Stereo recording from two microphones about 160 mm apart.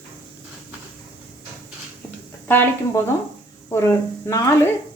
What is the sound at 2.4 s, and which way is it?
A woman's voice, 15° left (ahead or behind).